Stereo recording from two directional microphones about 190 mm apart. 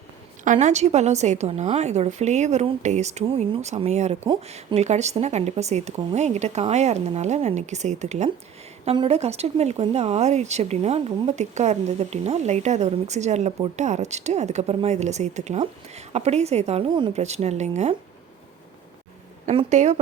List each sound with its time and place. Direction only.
0.4 s speech: 40° right (ahead or behind)
19.5 s speech: 40° right (ahead or behind)